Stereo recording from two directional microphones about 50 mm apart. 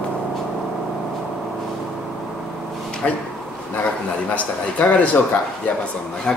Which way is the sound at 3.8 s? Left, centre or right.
Left.